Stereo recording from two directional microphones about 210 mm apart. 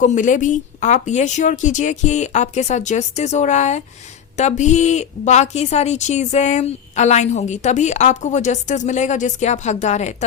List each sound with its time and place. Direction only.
0.0 s a woman's voice: 35° left (ahead or behind)